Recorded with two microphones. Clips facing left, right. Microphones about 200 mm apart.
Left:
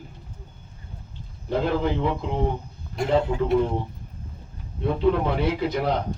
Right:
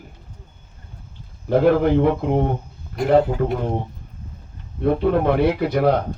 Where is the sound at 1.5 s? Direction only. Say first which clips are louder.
Right 8 dB; 55° right (ahead or behind).